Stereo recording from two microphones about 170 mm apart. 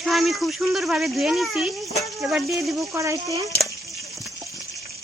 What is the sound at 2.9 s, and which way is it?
Speech, 20° right (ahead or behind).